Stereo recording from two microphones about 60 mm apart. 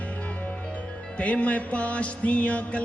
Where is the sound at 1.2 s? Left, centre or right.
Left.